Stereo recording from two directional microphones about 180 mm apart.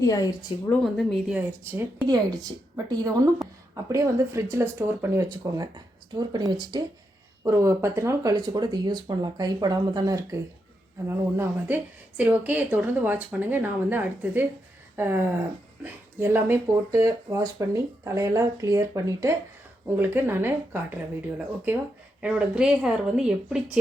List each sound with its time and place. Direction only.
0.0 s a woman's voice: 20° left (ahead or behind)
0.7 s speech: centre (ahead or behind); by 10.2 s 20° right (ahead or behind)
11.3 s speech: 10° right (ahead or behind)